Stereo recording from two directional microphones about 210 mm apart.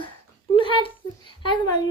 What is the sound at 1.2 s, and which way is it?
Speech, 25° left (ahead or behind).